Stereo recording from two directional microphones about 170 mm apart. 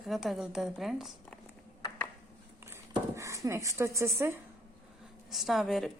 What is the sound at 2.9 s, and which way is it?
Speech, 15° right (ahead or behind).